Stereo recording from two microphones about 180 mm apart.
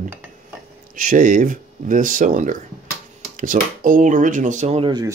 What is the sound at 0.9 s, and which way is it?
Speech, 50° right (ahead or behind).